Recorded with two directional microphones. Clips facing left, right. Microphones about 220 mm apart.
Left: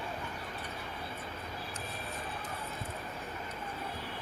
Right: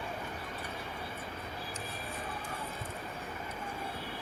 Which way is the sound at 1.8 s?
30° right (ahead or behind).